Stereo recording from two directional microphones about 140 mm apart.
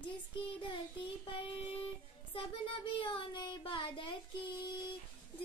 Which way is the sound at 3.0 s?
35° left (ahead or behind).